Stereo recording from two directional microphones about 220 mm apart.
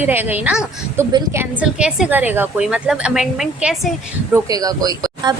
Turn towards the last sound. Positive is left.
turn(degrees=-15)  # may be behind; listen again after turning